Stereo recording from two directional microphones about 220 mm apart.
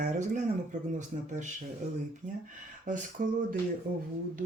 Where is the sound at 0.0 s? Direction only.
35° right (ahead or behind).